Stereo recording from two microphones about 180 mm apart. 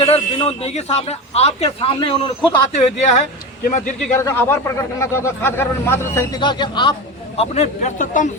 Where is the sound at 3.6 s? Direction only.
50° left (ahead or behind).